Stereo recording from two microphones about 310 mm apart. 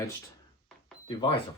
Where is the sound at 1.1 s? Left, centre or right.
Centre.